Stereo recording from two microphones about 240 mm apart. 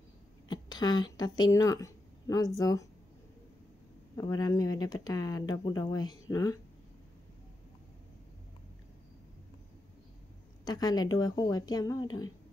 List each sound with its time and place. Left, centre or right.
0.5 s speech: centre
4.2 s speech: centre
10.6 s speech: centre